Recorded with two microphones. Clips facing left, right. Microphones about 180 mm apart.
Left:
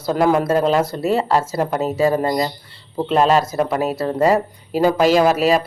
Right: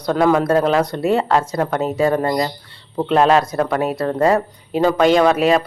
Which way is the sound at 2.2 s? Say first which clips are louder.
Even; 20° left (ahead or behind).